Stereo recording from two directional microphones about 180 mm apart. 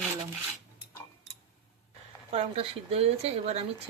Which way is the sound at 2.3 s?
35° right (ahead or behind).